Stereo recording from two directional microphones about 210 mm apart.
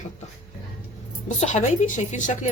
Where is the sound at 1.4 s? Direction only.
35° left (ahead or behind).